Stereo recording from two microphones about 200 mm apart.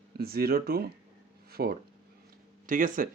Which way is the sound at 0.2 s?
50° right (ahead or behind).